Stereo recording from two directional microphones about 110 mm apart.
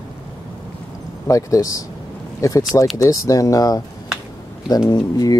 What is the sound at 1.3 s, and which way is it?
Speech, 30° left (ahead or behind).